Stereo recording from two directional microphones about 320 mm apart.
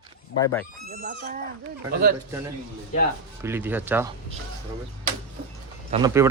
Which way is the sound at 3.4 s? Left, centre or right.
Centre.